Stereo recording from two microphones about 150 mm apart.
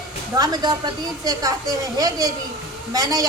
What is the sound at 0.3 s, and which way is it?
A woman's voice, 25° right (ahead or behind).